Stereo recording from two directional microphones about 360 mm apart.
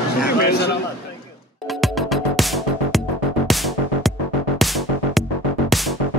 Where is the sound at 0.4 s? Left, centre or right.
Left.